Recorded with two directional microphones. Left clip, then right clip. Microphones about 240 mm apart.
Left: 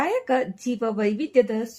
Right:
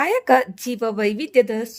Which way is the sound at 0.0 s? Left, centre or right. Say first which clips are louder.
Right 6 dB; right.